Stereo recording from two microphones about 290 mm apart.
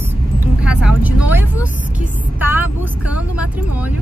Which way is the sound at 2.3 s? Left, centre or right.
Centre.